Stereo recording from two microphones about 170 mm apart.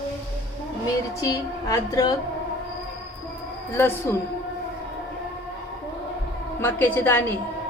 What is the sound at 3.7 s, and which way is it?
Speech, 15° left (ahead or behind).